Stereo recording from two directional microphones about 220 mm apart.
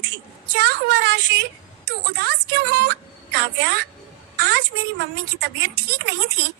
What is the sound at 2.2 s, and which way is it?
Speech, 45° right (ahead or behind).